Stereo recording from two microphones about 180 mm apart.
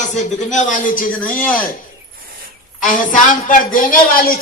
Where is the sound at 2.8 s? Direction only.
45° left (ahead or behind).